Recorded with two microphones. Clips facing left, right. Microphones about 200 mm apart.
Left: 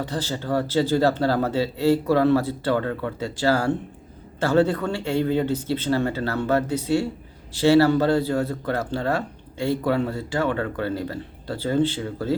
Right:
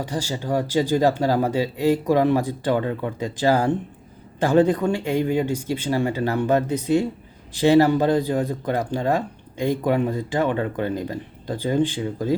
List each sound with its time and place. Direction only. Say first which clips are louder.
0.0 s speech: right 1 dB; 10° right (ahead or behind)